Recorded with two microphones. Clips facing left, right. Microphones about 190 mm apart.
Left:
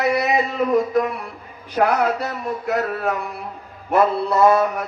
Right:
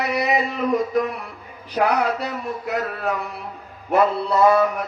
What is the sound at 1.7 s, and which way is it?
A man's voice, 50° left (ahead or behind).